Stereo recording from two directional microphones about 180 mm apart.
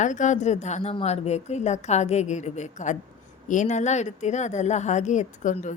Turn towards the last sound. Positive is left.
turn(degrees=45)  # may be behind; listen again after turning